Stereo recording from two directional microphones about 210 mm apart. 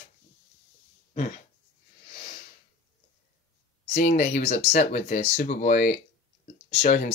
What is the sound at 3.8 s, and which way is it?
Speech, 35° left (ahead or behind).